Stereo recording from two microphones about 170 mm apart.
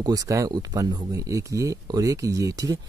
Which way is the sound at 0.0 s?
20° right (ahead or behind).